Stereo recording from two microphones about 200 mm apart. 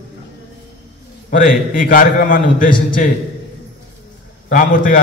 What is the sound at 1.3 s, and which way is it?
A man's voice, 45° left (ahead or behind).